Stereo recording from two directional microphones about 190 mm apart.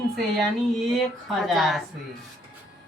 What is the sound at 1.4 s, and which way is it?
Speech, centre (ahead or behind).